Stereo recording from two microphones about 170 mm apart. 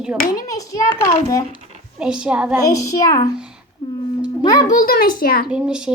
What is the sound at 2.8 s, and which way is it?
Speech, 20° left (ahead or behind).